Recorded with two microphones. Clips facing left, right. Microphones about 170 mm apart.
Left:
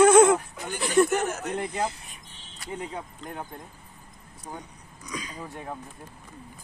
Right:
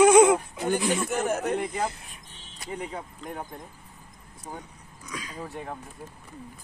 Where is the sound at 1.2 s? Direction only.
55° right (ahead or behind).